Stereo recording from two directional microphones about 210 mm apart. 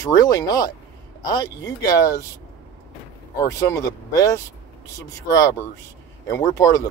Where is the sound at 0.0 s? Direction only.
15° left (ahead or behind).